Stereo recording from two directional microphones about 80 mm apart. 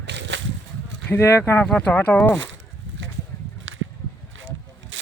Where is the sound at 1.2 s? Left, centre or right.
Left.